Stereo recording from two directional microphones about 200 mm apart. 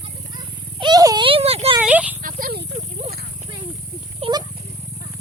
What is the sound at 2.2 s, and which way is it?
Snake, 45° right (ahead or behind).